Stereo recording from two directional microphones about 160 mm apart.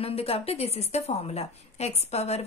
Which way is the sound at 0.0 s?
40° left (ahead or behind).